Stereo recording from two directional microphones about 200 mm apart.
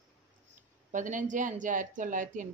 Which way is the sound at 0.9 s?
40° right (ahead or behind).